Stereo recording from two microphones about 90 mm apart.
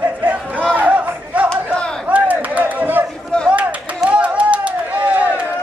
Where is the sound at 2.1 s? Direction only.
20° right (ahead or behind).